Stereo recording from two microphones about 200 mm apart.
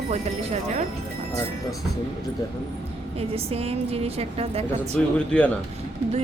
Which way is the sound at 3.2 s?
30° right (ahead or behind).